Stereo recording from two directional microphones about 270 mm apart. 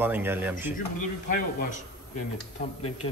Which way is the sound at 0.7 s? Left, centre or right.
Left.